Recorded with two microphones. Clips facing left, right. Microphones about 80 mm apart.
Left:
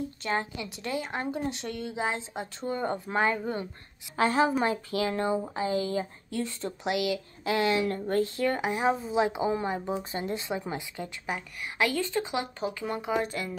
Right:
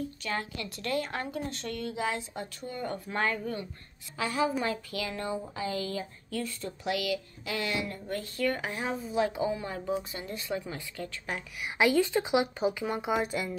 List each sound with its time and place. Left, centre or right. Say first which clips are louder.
0.2 s a woman's voice: left 4 dB; left
4.2 s a woman's voice: left 5 dB; left
11.3 s a woman's voice: left 3 dB; centre
11.6 s speech: right 4 dB; centre